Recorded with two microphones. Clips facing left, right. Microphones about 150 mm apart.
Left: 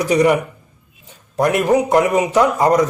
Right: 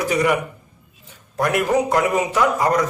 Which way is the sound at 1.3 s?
20° left (ahead or behind).